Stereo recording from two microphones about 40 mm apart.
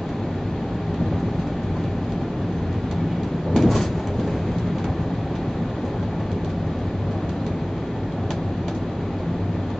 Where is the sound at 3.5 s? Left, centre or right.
Centre.